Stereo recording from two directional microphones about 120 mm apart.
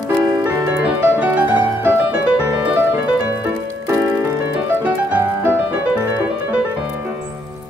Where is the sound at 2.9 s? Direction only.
15° right (ahead or behind).